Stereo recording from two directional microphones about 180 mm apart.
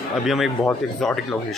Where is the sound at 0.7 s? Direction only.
5° left (ahead or behind).